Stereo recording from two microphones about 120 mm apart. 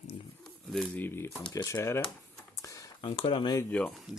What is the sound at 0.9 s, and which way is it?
Speech, 20° left (ahead or behind).